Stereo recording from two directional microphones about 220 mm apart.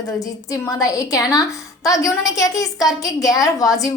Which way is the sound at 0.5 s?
15° left (ahead or behind).